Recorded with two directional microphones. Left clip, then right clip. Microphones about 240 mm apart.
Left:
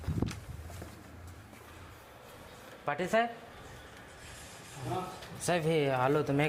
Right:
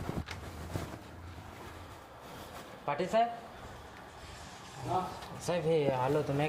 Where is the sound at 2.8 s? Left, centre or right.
Left.